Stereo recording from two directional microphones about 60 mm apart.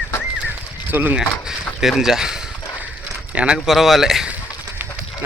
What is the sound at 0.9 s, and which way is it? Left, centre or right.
Speech, right.